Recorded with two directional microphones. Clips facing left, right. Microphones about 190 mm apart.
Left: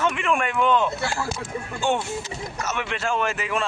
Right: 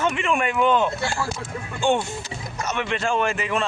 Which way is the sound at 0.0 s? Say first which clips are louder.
Right 1 dB; centre (ahead or behind).